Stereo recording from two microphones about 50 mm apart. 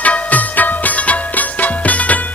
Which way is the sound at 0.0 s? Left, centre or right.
Left.